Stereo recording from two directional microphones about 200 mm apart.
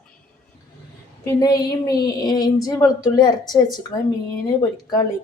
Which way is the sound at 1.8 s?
20° left (ahead or behind).